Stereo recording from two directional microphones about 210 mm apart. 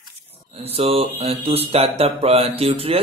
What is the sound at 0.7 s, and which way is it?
Speech, 30° right (ahead or behind).